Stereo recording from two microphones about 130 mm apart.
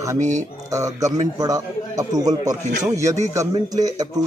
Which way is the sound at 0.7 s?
25° right (ahead or behind).